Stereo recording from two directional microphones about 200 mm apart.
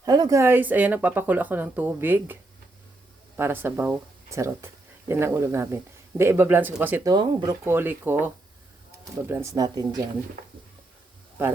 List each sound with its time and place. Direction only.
0.0 s speech: 20° right (ahead or behind)
9.3 s speech: 15° right (ahead or behind)